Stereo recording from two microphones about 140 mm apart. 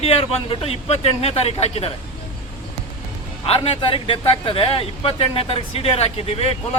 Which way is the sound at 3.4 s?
45° left (ahead or behind).